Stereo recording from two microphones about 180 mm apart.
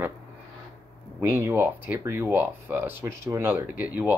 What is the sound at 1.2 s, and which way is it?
Speech, 10° right (ahead or behind).